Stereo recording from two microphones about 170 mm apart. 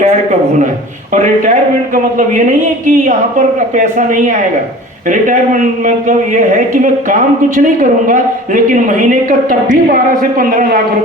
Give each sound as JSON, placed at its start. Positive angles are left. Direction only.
{"t": 1.1, "sound": "a man's voice", "side_deg": -50}